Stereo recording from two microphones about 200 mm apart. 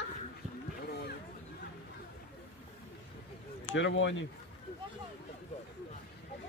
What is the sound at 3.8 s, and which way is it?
Speech, 65° left (ahead or behind).